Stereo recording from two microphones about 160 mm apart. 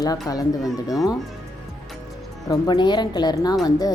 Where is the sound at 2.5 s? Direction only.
25° left (ahead or behind).